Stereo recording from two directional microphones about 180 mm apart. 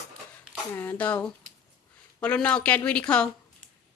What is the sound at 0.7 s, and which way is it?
Speech, 10° left (ahead or behind).